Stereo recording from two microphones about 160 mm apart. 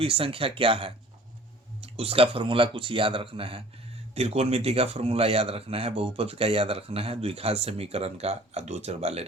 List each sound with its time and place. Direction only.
0.0 s speech: 35° right (ahead or behind)